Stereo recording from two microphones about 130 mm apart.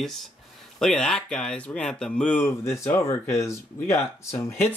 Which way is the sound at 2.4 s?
20° left (ahead or behind).